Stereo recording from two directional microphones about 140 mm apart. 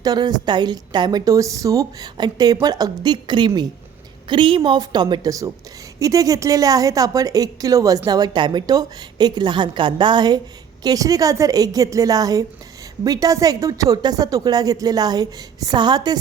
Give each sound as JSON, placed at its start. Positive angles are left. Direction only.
{"t": 0.0, "sound": "a woman's voice", "side_deg": -30}